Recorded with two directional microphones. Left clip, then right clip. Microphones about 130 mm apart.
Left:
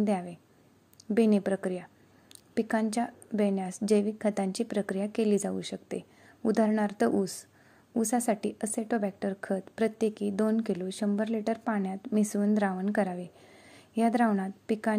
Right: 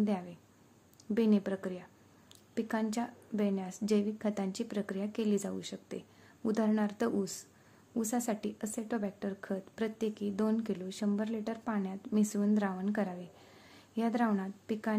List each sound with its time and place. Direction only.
0.0 s a woman's voice: 40° left (ahead or behind)